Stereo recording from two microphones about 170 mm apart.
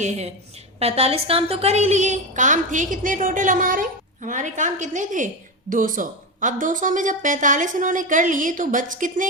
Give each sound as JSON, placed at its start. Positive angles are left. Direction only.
{"t": 0.0, "sound": "a woman's voice", "side_deg": -45}